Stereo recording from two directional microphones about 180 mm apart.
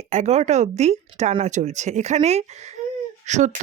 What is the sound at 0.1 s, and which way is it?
Speech, 40° right (ahead or behind).